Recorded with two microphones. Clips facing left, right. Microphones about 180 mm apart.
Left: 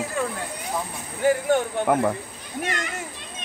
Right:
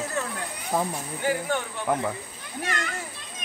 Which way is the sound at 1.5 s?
55° left (ahead or behind).